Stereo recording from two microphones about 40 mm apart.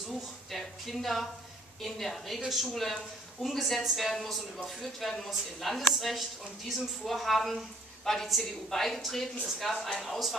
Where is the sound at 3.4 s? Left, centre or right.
Centre.